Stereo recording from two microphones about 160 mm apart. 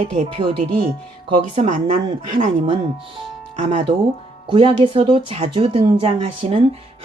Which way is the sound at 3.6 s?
45° right (ahead or behind).